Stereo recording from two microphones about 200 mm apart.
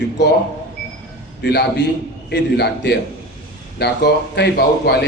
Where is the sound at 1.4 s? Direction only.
60° left (ahead or behind).